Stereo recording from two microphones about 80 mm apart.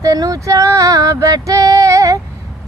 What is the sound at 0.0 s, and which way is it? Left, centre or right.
Female singing, right.